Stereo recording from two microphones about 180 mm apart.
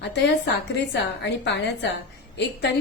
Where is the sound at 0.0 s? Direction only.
75° left (ahead or behind).